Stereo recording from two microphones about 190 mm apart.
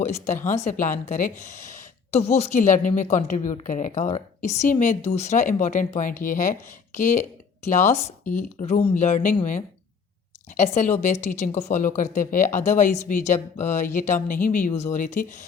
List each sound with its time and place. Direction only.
0.0 s speech: 35° left (ahead or behind)
8.5 s speech: 35° left (ahead or behind)